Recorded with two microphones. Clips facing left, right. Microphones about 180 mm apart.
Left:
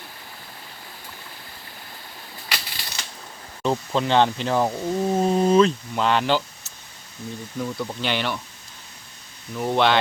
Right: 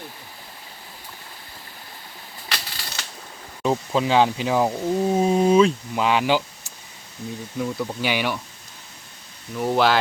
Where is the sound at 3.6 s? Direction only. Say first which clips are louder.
Right 1 dB; 5° right (ahead or behind).